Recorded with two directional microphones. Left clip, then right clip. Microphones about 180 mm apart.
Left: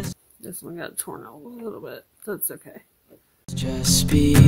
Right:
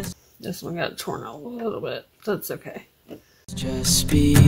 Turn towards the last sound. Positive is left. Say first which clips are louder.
# left 1 dB
turn(degrees=0)  # may be behind; listen again after turning